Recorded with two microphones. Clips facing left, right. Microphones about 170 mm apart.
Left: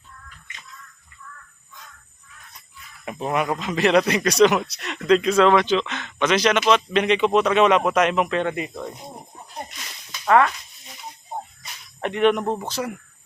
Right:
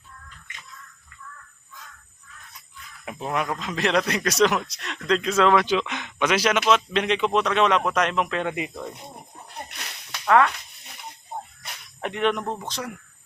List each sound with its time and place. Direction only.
3.0 s a man's voice: centre (ahead or behind)
9.6 s a sound: 65° right (ahead or behind)
10.2 s a man's voice: centre (ahead or behind)
11.9 s a man's voice: centre (ahead or behind)